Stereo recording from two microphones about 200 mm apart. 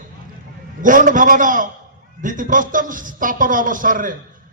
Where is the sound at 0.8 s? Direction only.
40° right (ahead or behind).